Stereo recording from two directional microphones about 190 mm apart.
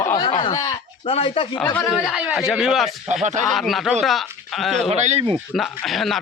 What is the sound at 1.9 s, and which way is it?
A man's voice, 5° right (ahead or behind).